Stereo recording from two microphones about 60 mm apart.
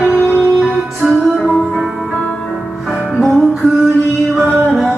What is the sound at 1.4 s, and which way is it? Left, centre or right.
Music, centre.